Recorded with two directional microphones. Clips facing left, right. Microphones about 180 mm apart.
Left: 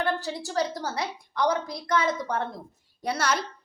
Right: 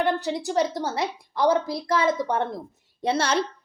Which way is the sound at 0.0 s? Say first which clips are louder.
Right 4 dB; 20° right (ahead or behind).